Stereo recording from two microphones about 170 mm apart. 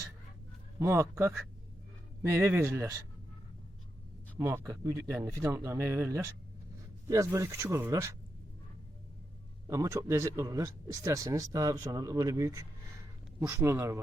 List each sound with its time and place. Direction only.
0.8 s speech: 15° right (ahead or behind)
4.4 s speech: 15° right (ahead or behind)
9.6 s speech: 20° right (ahead or behind)